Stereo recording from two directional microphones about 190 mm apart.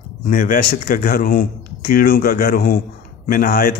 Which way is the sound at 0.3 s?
50° left (ahead or behind).